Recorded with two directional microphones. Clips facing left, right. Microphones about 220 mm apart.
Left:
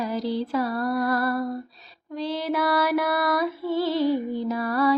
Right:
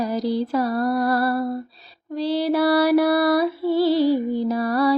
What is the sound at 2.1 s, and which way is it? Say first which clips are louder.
Music: right 6 dB; 35° right (ahead or behind).